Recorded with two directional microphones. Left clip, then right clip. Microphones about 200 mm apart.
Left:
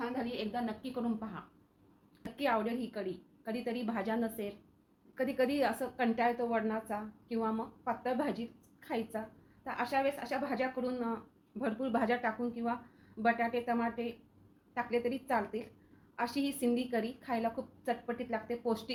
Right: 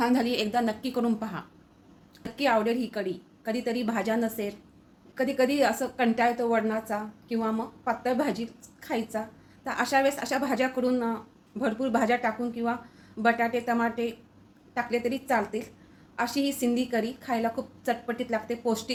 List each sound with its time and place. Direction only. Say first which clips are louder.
0.0 s a woman's voice: right 12 dB; 65° right (ahead or behind)
0.3 s a woman's voice: right 11 dB; 35° right (ahead or behind)
2.2 s a woman's voice: right 8 dB; 10° right (ahead or behind)
9.6 s a woman's voice: right 8 dB; 15° right (ahead or behind)